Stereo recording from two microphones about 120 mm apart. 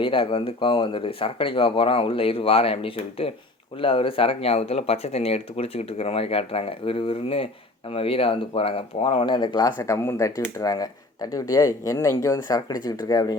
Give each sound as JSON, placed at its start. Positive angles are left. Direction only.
{"t": 0.0, "sound": "speech", "side_deg": 45}
{"t": 9.7, "sound": "speech", "side_deg": 20}